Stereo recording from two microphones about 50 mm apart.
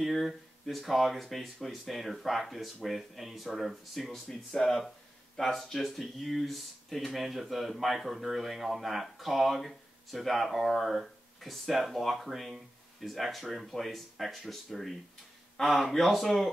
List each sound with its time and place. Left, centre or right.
0.0 s speech: centre